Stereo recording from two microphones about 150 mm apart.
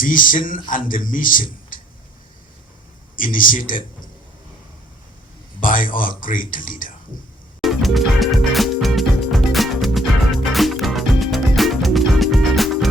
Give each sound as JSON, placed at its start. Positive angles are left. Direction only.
{"t": 0.0, "sound": "a man's voice", "side_deg": 65}
{"t": 3.2, "sound": "a man's voice", "side_deg": 65}
{"t": 5.5, "sound": "a man's voice", "side_deg": 65}
{"t": 7.6, "sound": "music", "side_deg": 0}